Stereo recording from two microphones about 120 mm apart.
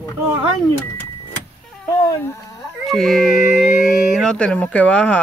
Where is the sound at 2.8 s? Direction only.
Centre (ahead or behind).